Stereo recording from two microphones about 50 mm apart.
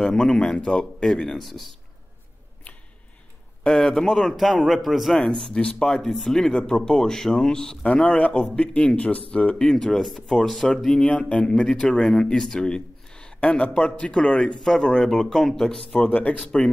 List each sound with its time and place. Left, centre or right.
0.1 s speech: centre
0.6 s speech: centre
3.6 s speech: centre
7.8 s speech: left
9.7 s speech: centre
10.9 s speech: left
16.1 s speech: left